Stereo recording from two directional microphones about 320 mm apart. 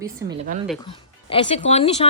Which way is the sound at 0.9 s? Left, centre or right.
Centre.